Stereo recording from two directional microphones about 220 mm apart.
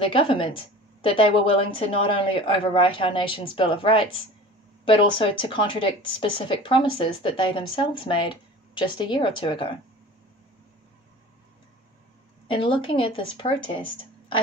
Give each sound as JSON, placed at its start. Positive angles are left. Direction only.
{"t": 0.0, "sound": "speech", "side_deg": 25}
{"t": 12.4, "sound": "speech", "side_deg": 25}